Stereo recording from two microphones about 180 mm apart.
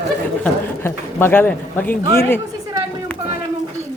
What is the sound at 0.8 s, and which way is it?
Speech, 15° left (ahead or behind).